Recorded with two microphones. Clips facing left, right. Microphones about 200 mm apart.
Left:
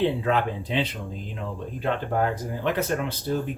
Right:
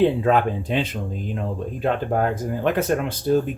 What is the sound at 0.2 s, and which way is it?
Speech, 50° right (ahead or behind).